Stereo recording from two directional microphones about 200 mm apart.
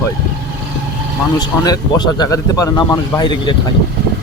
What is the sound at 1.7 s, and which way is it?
Speech, 20° left (ahead or behind).